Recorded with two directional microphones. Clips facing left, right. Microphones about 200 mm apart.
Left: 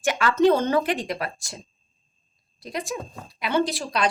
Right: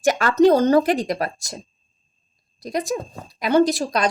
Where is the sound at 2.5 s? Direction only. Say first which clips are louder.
Right 6 dB; 40° right (ahead or behind).